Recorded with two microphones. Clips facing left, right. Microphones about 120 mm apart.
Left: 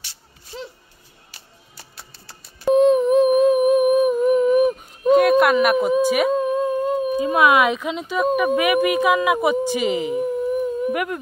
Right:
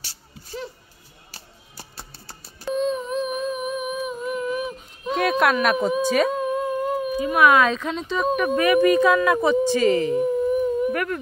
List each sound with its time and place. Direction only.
1.3 s music: 30° right (ahead or behind)
2.6 s humming: 60° left (ahead or behind)
5.1 s a sound: 5° left (ahead or behind)
6.0 s speech: 10° left (ahead or behind)
6.3 s humming: 25° left (ahead or behind); by 8.3 s 5° left (ahead or behind)
8.4 s speech: 10° left (ahead or behind)